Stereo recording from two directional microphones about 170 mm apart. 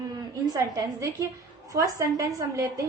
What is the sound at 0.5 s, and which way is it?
A woman's voice, 20° right (ahead or behind).